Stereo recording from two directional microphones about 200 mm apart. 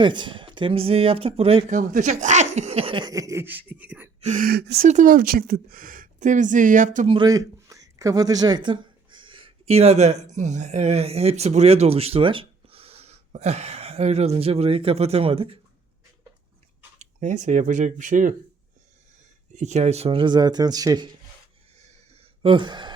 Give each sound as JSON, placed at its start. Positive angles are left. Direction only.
{"t": 0.0, "sound": "speech", "side_deg": -25}
{"t": 4.2, "sound": "speech", "side_deg": -40}
{"t": 4.9, "sound": "a woman's voice", "side_deg": -40}
{"t": 7.2, "sound": "speech", "side_deg": -15}
{"t": 17.0, "sound": "a woman's voice", "side_deg": -35}
{"t": 19.5, "sound": "speech", "side_deg": -35}
{"t": 22.4, "sound": "speech", "side_deg": -25}